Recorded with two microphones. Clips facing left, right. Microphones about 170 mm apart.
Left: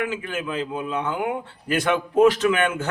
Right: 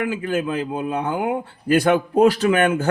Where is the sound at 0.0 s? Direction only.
35° right (ahead or behind).